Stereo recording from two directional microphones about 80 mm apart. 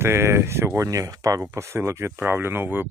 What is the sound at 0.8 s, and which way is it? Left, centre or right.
Speech, right.